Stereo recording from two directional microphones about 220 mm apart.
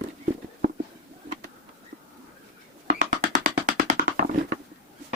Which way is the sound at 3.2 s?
35° right (ahead or behind).